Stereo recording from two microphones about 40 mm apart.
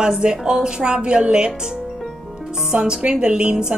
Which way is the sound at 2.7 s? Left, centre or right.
Right.